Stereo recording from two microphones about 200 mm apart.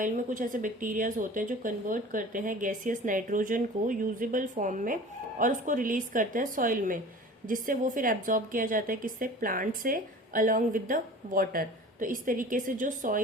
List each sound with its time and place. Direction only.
0.0 s a woman's voice: 40° right (ahead or behind)